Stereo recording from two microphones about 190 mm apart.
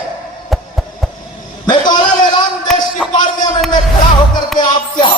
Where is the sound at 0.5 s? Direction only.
Centre (ahead or behind).